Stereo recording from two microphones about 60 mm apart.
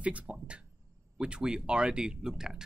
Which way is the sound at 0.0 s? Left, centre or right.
Right.